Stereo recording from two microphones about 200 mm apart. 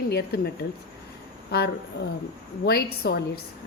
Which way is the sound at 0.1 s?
55° left (ahead or behind).